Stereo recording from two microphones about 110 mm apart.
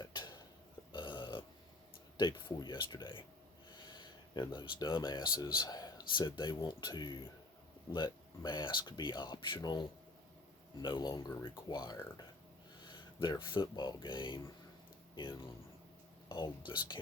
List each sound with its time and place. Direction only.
0.0 s a sound: 40° left (ahead or behind)
0.9 s burping: 45° left (ahead or behind)
2.1 s speech: 40° left (ahead or behind)
10.8 s speech: 40° left (ahead or behind)